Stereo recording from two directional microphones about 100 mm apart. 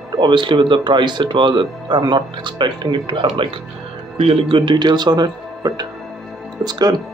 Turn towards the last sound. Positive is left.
turn(degrees=-45)  # may be behind; listen again after turning